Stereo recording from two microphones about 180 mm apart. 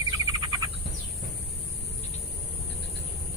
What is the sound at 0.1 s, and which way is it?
Bird, 25° right (ahead or behind).